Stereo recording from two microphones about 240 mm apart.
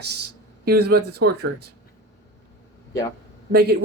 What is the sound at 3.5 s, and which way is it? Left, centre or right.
Speech, right.